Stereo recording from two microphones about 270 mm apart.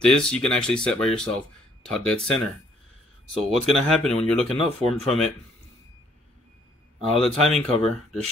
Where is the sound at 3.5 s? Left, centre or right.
Centre.